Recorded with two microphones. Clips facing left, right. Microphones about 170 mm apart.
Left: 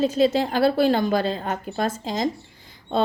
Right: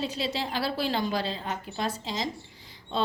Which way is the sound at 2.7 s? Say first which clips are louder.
Left 7 dB; 55° left (ahead or behind).